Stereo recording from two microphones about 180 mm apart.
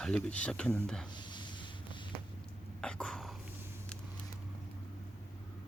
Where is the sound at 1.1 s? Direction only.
25° left (ahead or behind).